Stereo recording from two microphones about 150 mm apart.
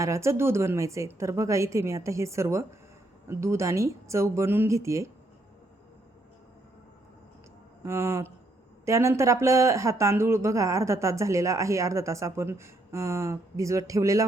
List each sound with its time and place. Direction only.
0.0 s speech: 20° right (ahead or behind)
7.8 s speech: 15° right (ahead or behind)